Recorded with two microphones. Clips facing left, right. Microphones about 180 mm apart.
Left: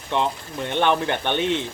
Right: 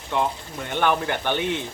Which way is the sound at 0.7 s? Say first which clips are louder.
Left 2 dB; 25° left (ahead or behind).